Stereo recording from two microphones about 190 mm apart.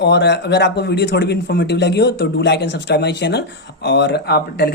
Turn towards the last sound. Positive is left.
turn(degrees=55)  # may be behind; listen again after turning